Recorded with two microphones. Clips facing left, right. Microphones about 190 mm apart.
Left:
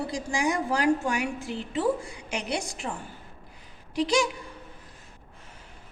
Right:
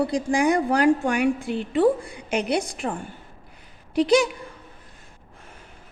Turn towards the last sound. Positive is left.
turn(degrees=-55)  # may be behind; listen again after turning